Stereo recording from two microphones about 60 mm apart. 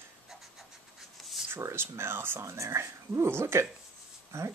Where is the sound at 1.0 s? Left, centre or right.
Centre.